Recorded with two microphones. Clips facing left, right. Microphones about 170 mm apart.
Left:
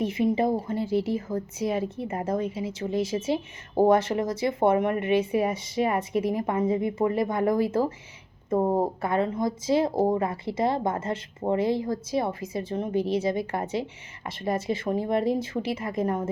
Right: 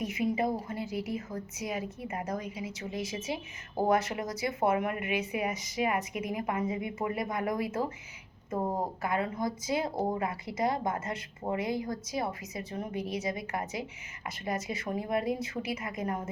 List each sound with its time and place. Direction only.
0.0 s speech: 30° left (ahead or behind)